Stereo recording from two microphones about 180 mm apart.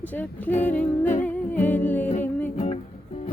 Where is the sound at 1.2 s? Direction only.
10° left (ahead or behind).